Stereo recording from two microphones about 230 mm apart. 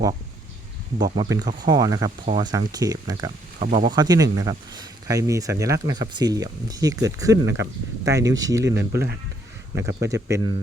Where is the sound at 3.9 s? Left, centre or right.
Centre.